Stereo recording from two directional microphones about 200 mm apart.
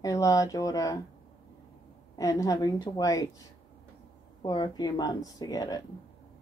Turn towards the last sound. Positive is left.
turn(degrees=20)  # may be behind; listen again after turning